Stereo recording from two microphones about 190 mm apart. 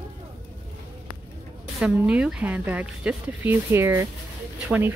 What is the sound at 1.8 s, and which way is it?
Speech, 5° right (ahead or behind).